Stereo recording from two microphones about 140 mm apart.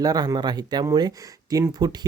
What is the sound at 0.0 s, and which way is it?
Speech, 25° right (ahead or behind).